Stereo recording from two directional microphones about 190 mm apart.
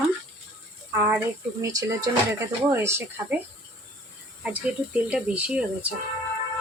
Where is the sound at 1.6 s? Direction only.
20° right (ahead or behind).